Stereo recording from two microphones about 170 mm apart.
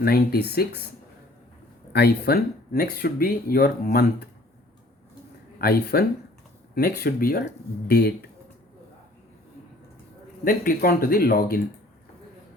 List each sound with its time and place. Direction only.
0.0 s speech: 65° left (ahead or behind)
1.9 s speech: 70° left (ahead or behind)
5.5 s speech: 65° left (ahead or behind)
10.4 s speech: 60° left (ahead or behind)